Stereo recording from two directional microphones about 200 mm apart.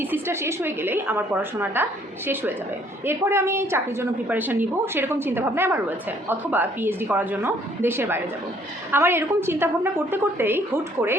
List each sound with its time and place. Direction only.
0.0 s a woman's voice: 10° right (ahead or behind)